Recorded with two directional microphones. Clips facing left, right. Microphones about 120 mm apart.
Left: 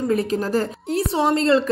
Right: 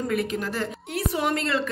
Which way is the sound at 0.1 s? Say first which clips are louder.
Left 6 dB; 35° left (ahead or behind).